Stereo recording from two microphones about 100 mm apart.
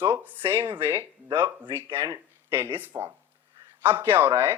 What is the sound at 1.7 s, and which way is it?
Speech, 25° right (ahead or behind).